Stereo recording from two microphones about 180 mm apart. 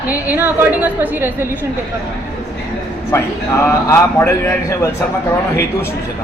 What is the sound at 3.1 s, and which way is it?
A man's voice, 15° left (ahead or behind).